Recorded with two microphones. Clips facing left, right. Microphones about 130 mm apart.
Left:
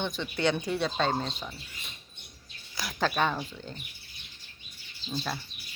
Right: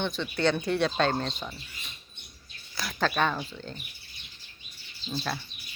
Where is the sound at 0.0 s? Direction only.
15° left (ahead or behind).